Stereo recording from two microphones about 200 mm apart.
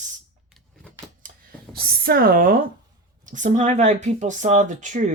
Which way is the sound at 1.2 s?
45° right (ahead or behind).